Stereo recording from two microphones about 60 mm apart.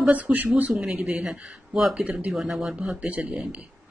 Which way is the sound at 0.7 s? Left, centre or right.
Centre.